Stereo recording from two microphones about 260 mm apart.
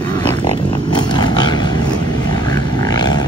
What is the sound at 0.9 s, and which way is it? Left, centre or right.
Roaring cats, centre.